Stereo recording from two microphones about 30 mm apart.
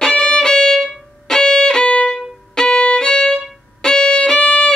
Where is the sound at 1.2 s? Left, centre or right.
Centre.